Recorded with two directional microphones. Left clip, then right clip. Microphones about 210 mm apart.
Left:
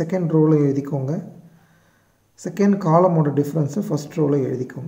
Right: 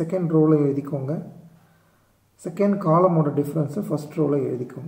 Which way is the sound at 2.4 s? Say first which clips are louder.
Left 2 dB; 35° left (ahead or behind).